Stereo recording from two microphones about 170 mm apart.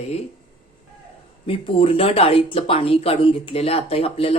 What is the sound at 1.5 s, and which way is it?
Speech, 35° left (ahead or behind).